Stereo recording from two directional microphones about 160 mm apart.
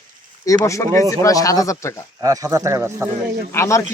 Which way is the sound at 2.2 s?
20° right (ahead or behind).